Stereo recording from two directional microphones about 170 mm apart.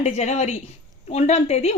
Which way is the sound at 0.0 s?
40° left (ahead or behind).